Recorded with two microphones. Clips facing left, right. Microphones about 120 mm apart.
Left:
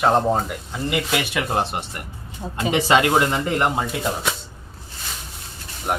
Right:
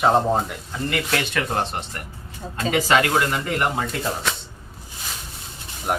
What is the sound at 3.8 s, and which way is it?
Speech, 10° left (ahead or behind).